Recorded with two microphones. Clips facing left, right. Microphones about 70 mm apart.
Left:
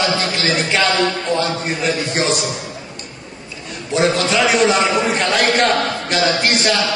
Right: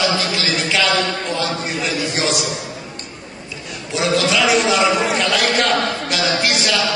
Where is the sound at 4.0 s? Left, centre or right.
Left.